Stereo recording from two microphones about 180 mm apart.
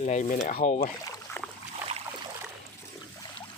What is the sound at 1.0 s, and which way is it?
Boat, 20° left (ahead or behind).